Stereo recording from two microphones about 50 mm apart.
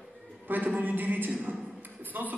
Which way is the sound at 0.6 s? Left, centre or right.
Right.